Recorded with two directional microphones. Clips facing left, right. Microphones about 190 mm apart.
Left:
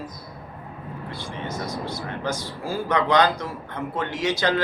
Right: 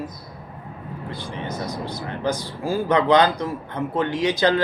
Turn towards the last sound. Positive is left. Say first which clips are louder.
# right 4 dB
turn(degrees=-15)  # may be behind; listen again after turning